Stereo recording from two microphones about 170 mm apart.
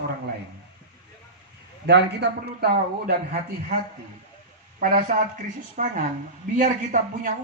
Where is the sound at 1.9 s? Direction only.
80° right.